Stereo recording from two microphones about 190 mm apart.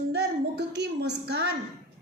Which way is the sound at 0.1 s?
60° right (ahead or behind).